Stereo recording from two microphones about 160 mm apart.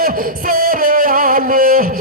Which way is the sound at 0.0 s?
65° right (ahead or behind).